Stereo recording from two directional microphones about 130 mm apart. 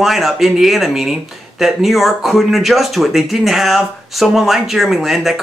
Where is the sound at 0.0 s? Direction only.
Centre (ahead or behind).